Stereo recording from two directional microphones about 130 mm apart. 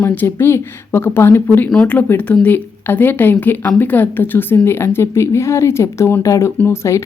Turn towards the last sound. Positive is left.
turn(degrees=20)  # may be behind; listen again after turning